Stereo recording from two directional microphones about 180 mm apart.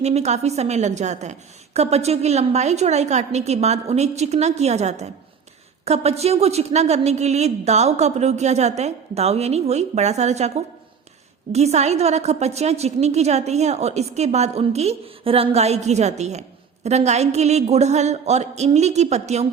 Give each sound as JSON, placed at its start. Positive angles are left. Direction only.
{"t": 0.0, "sound": "a woman's voice", "side_deg": -40}
{"t": 11.5, "sound": "a woman's voice", "side_deg": -35}